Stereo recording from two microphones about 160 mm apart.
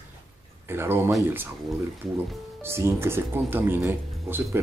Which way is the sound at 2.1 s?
15° right (ahead or behind).